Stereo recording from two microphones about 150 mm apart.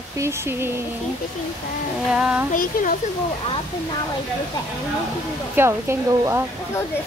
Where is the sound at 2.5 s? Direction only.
65° left (ahead or behind).